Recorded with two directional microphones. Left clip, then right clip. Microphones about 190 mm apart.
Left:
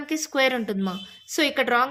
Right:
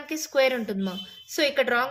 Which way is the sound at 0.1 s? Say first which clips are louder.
Even; 30° left (ahead or behind).